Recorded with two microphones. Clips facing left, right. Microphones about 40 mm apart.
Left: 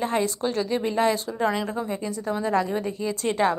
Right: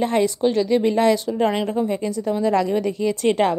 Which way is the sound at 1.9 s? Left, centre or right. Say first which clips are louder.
Right 5 dB; right.